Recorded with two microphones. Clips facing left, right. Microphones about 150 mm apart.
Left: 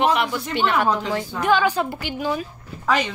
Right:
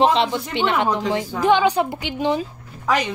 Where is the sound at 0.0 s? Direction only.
25° right (ahead or behind).